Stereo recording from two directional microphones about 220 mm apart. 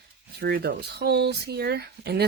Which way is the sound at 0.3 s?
50° right (ahead or behind).